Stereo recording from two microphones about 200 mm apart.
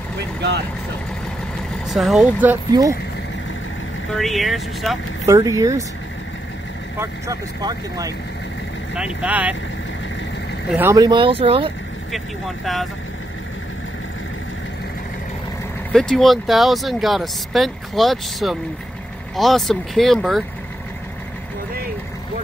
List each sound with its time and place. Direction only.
1.9 s speech: centre (ahead or behind)
4.2 s speech: centre (ahead or behind)
5.2 s speech: 15° right (ahead or behind)
7.0 s speech: 15° right (ahead or behind)
8.9 s speech: 5° right (ahead or behind)
10.7 s speech: 10° right (ahead or behind); by 11.7 s 25° right (ahead or behind)
12.1 s speech: centre (ahead or behind)
15.9 s speech: centre (ahead or behind)